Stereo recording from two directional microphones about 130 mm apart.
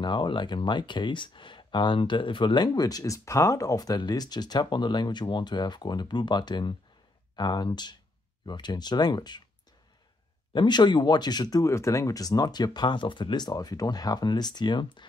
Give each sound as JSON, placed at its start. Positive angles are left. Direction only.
{"t": 0.0, "sound": "speech", "side_deg": 35}
{"t": 10.5, "sound": "speech", "side_deg": 35}